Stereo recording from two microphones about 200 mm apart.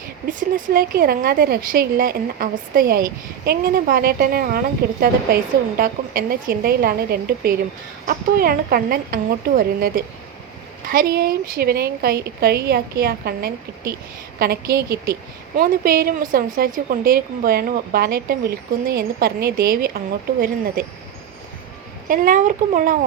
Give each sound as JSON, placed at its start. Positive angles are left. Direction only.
{"t": 0.3, "sound": "a woman's voice", "side_deg": -40}
{"t": 22.1, "sound": "speech", "side_deg": -40}